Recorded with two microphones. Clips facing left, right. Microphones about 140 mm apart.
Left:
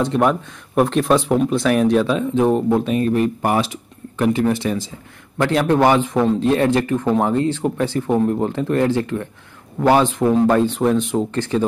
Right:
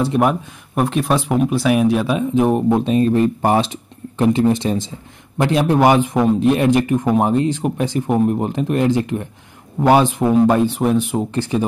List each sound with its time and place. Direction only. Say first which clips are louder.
0.0 s speech: right 1 dB; 10° right (ahead or behind)